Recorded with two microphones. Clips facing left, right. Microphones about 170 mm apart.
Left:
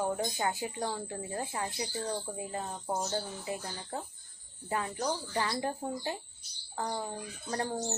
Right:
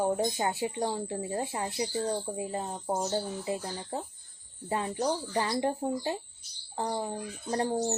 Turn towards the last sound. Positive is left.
turn(degrees=-25)  # may be behind; listen again after turning